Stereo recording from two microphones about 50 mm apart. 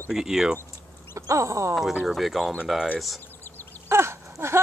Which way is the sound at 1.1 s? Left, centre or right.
Right.